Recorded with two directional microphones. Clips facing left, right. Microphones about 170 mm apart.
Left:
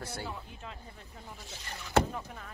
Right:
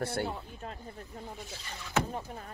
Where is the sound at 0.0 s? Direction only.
60° right (ahead or behind).